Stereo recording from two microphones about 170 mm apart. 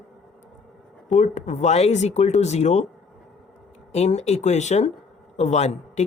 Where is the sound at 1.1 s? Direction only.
45° left (ahead or behind).